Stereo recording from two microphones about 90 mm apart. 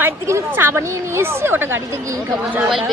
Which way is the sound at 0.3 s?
30° right (ahead or behind).